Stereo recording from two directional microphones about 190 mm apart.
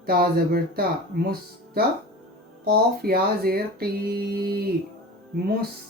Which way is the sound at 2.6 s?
55° right (ahead or behind).